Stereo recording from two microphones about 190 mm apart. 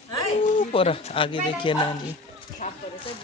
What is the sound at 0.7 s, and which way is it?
Speech, 30° left (ahead or behind).